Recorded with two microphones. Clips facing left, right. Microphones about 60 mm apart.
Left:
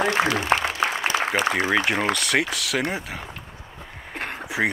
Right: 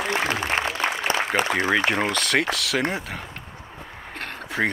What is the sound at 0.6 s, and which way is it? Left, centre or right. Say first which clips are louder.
Applause: even; right.